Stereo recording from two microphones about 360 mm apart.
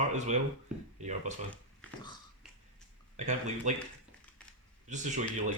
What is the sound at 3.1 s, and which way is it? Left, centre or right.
Speech, centre.